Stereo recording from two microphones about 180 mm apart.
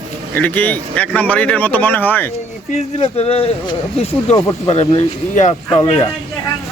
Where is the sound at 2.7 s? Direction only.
35° left (ahead or behind).